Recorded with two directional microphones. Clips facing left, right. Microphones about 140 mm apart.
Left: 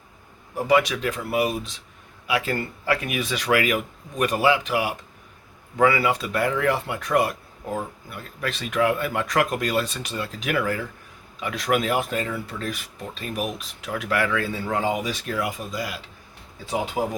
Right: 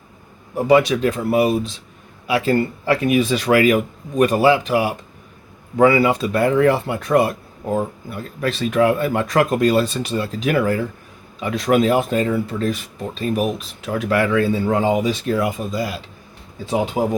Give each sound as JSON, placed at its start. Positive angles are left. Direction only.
{"t": 0.5, "sound": "speech", "side_deg": -30}